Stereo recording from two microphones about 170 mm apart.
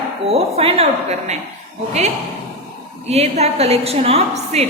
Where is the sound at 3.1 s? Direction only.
40° right (ahead or behind).